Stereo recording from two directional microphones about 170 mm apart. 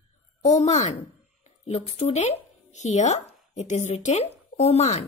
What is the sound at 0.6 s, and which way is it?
A woman's voice, 45° left (ahead or behind).